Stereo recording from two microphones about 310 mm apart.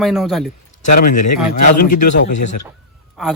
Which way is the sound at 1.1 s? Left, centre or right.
Left.